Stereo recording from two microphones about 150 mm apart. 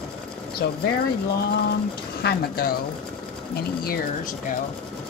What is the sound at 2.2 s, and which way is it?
Speech, 85° left.